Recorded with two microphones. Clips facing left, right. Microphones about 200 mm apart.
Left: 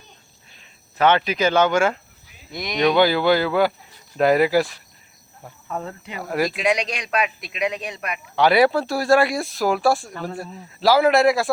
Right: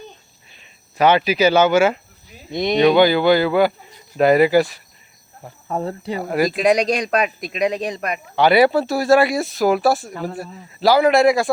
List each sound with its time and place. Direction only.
0.5 s speech: 10° right (ahead or behind)
2.5 s speech: 25° right (ahead or behind)
2.8 s speech: centre (ahead or behind)
5.6 s speech: 35° right (ahead or behind)
6.2 s speech: centre (ahead or behind)
6.5 s speech: 40° right (ahead or behind)
8.4 s speech: centre (ahead or behind)